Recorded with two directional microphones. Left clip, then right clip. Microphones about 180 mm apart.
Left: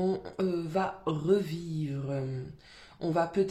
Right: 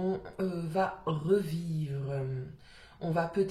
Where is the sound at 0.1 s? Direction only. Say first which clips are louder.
Left 3 dB; 40° left (ahead or behind).